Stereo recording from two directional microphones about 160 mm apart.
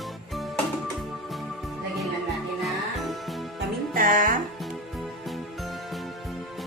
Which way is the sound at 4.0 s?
55° right (ahead or behind).